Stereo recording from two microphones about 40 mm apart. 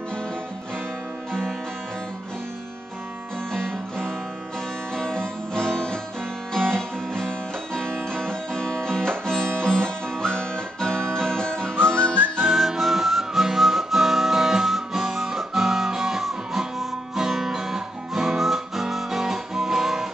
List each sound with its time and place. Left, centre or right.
3.5 s music: centre
11.7 s whistling: right
12.4 s music: centre
17.1 s guitar: centre